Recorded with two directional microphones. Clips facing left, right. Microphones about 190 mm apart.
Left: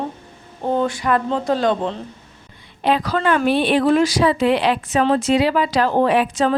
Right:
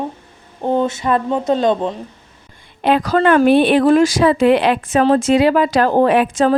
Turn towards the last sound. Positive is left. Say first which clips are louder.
# right 3 dB
turn(degrees=-50)  # may be behind; listen again after turning